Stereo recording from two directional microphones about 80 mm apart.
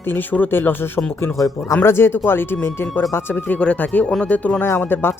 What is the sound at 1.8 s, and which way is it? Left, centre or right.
Speech, left.